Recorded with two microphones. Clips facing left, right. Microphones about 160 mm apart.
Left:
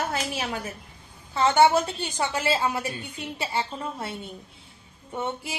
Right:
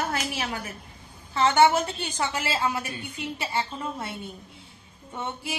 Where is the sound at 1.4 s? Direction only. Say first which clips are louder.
Left 1 dB; 25° left (ahead or behind).